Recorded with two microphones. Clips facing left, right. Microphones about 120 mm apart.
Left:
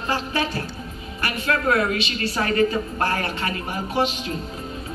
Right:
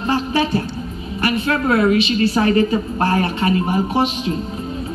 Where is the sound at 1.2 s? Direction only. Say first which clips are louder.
Right 4 dB; 25° right (ahead or behind).